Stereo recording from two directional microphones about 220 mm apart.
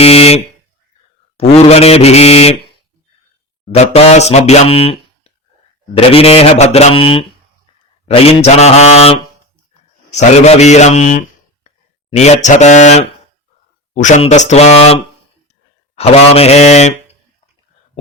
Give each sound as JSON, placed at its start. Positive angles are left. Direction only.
{"t": 0.0, "sound": "buzzer", "side_deg": 25}
{"t": 1.4, "sound": "speech", "side_deg": 25}
{"t": 3.7, "sound": "a man's voice", "side_deg": 30}